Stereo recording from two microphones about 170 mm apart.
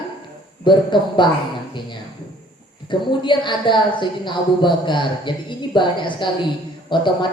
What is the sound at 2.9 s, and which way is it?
Speech, 30° left (ahead or behind).